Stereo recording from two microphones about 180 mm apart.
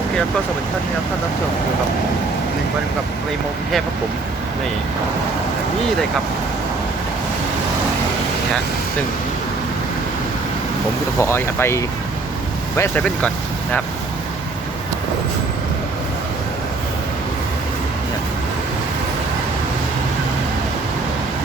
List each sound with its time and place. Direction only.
11.2 s speech: 15° left (ahead or behind)